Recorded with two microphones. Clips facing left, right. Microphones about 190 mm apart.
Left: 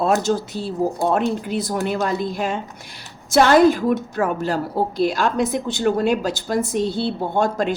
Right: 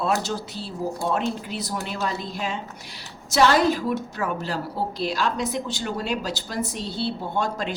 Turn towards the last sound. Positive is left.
turn(degrees=50)  # may be behind; listen again after turning